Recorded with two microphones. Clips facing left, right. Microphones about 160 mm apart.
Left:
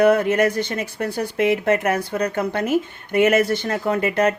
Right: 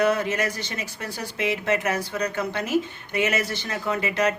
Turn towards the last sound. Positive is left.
turn(degrees=50)  # may be behind; listen again after turning